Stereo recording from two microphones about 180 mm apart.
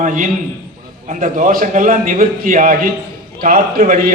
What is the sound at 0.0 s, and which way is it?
A man's voice, 45° right (ahead or behind).